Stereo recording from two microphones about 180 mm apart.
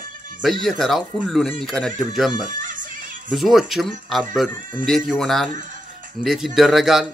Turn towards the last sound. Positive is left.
turn(degrees=0)  # may be behind; listen again after turning